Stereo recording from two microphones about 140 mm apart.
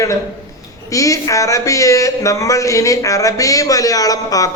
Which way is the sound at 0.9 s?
25° left (ahead or behind).